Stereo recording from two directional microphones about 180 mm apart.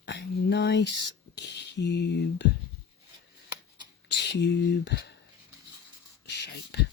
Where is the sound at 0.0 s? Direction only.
75° left (ahead or behind).